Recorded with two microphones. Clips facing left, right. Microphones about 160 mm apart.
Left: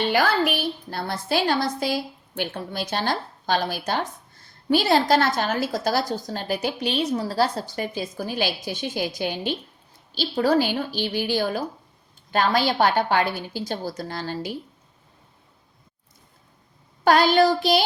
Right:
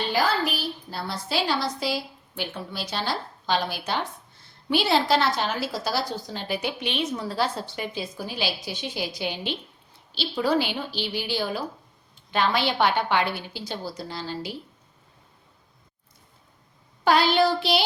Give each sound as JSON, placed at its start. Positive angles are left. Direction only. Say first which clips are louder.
{"t": 0.1, "sound": "a woman's voice", "louder": "left 3 dB", "side_deg": 65}
{"t": 17.0, "sound": "a woman's voice", "louder": "left 3 dB", "side_deg": 45}